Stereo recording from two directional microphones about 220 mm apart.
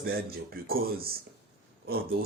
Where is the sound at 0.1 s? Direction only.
45° right (ahead or behind).